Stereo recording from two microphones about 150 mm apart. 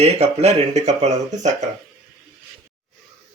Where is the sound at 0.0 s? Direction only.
45° right (ahead or behind).